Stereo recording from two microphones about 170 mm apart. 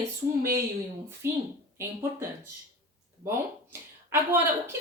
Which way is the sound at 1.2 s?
15° right (ahead or behind).